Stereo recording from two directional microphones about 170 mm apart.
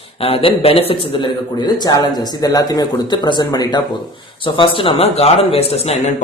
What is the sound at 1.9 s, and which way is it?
Speech, 20° left (ahead or behind).